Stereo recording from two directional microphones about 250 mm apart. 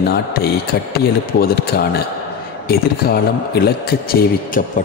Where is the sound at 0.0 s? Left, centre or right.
Left.